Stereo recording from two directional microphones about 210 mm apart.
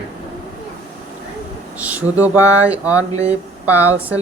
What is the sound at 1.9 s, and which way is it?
Speech, 10° right (ahead or behind).